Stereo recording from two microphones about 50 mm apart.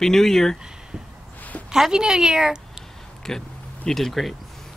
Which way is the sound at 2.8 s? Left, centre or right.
Centre.